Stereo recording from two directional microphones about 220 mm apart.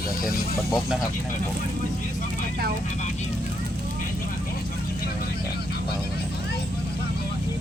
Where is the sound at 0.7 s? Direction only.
Centre (ahead or behind).